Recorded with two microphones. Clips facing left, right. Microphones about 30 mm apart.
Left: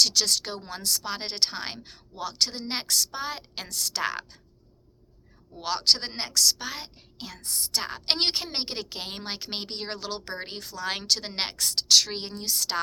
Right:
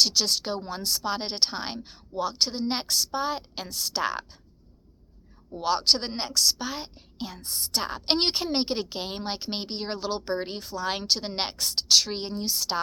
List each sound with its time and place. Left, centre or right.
0.0 s a woman's voice: left
2.8 s a woman's voice: left
5.6 s a woman's voice: left
7.4 s a woman's voice: left
7.8 s a woman's voice: left
8.8 s a woman's voice: left
10.4 s a woman's voice: left
10.7 s a woman's voice: left
12.5 s a woman's voice: left